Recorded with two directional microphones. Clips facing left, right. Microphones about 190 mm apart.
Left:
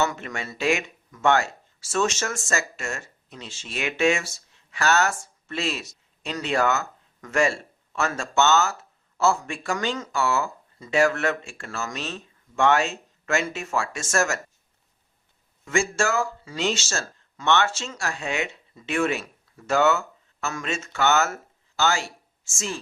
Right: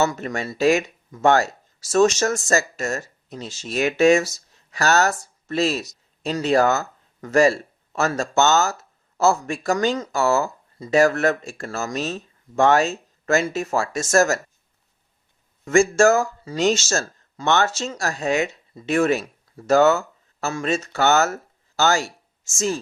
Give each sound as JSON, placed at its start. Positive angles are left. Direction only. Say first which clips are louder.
{"t": 0.0, "sound": "speech", "louder": "right 4 dB", "side_deg": -35}
{"t": 15.6, "sound": "speech", "louder": "right 9 dB", "side_deg": -45}